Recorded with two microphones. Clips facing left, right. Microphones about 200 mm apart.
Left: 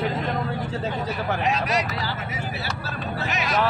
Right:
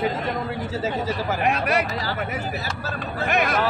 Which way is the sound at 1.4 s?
60° right (ahead or behind).